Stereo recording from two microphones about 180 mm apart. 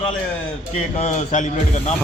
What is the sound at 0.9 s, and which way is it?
A man's voice, 40° left (ahead or behind).